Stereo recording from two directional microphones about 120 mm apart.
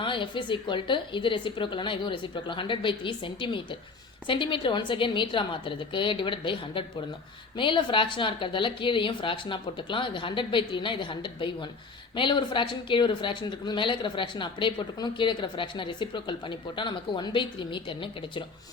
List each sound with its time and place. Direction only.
0.0 s speech: 45° left (ahead or behind)